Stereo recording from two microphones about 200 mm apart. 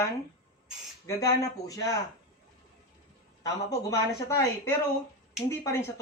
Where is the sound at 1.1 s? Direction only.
15° left (ahead or behind).